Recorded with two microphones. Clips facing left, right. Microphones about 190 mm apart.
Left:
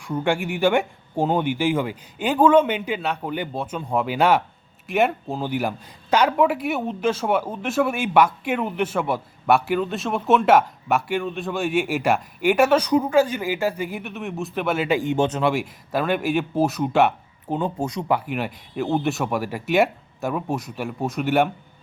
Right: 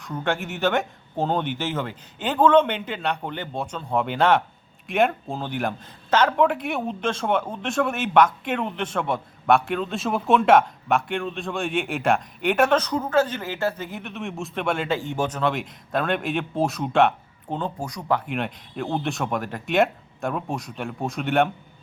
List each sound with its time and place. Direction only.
0.0 s speech: 10° left (ahead or behind)
14.8 s speech: 15° left (ahead or behind)
15.4 s speech: 10° left (ahead or behind)
17.7 s speech: 25° left (ahead or behind)
18.1 s speech: 5° left (ahead or behind)